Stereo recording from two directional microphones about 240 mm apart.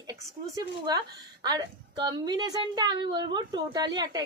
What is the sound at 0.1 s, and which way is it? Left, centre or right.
Speech, centre.